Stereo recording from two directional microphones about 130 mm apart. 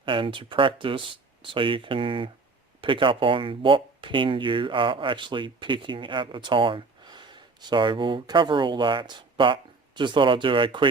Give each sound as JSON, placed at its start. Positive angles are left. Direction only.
{"t": 0.0, "sound": "speech", "side_deg": -40}